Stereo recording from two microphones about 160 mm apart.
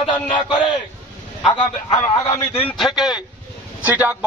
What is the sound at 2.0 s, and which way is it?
Speech, 20° left (ahead or behind).